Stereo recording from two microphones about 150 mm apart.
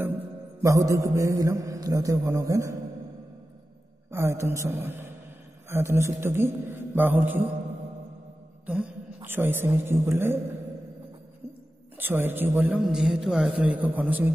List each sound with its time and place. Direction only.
0.0 s music: 15° right (ahead or behind)
4.1 s a man's voice: 15° right (ahead or behind)
8.6 s a man's voice: 10° right (ahead or behind)
12.0 s a man's voice: 15° right (ahead or behind)